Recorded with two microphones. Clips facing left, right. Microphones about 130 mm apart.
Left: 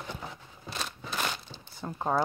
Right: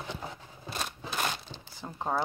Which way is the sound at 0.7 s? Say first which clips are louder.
Right 1 dB; 50° right (ahead or behind).